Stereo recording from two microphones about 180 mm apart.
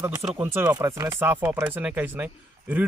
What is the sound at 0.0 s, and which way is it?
Speech, 15° right (ahead or behind).